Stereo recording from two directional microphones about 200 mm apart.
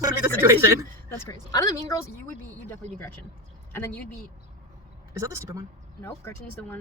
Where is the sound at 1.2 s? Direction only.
15° left (ahead or behind).